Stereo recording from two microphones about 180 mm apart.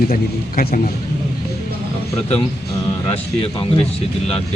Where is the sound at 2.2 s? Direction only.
35° left (ahead or behind).